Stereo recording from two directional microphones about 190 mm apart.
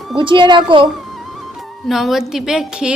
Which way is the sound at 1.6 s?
Centre (ahead or behind).